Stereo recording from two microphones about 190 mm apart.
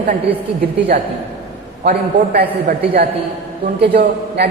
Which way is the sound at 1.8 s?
55° right (ahead or behind).